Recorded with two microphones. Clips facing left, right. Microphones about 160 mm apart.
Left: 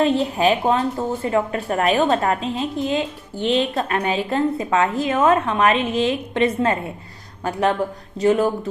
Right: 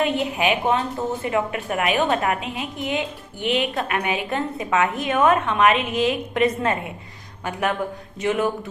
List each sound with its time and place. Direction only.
0.3 s a woman's voice: 35° left (ahead or behind)
2.4 s speech: 10° right (ahead or behind)
3.8 s a woman's voice: 35° left (ahead or behind)